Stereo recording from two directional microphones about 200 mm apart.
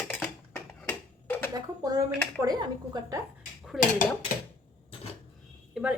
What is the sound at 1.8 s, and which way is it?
Cutlery, 15° right (ahead or behind).